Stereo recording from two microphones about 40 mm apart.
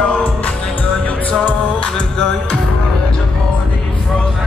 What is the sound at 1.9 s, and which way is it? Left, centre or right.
Music, centre.